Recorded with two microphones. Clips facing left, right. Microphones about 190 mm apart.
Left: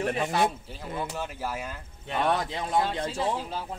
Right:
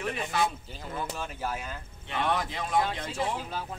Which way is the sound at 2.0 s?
35° left (ahead or behind).